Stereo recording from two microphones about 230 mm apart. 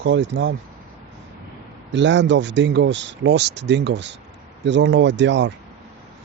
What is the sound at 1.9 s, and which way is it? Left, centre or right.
Speech, right.